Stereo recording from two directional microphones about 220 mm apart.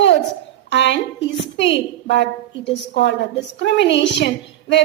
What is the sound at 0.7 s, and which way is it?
A woman's voice, 55° left (ahead or behind).